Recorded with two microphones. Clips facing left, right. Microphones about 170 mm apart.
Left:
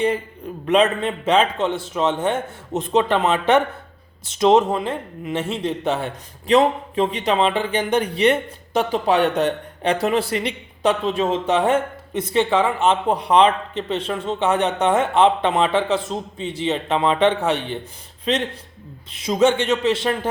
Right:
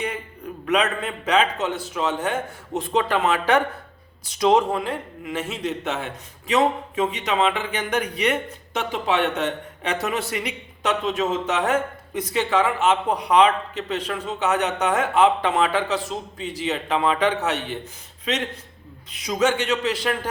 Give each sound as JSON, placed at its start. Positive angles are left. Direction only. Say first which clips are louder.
{"t": 0.6, "sound": "a man's voice", "louder": "left 5 dB", "side_deg": 30}
{"t": 19.1, "sound": "a man's voice", "louder": "left 4 dB", "side_deg": 25}